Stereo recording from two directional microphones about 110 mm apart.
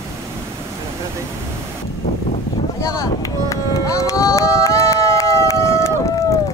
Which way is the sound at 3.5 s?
30° left (ahead or behind).